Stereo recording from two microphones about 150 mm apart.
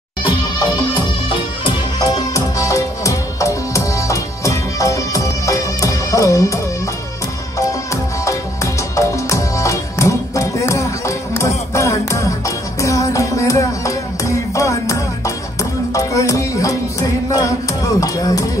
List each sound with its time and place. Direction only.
0.9 s music: 35° left (ahead or behind)
17.8 s speech: 20° left (ahead or behind)